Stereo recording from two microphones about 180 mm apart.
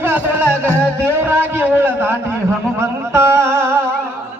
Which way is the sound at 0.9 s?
10° right (ahead or behind).